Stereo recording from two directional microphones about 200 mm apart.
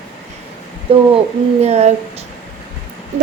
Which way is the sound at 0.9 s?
25° right (ahead or behind).